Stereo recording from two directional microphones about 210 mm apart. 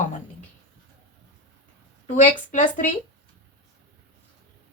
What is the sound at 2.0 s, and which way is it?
Speech, 35° left (ahead or behind).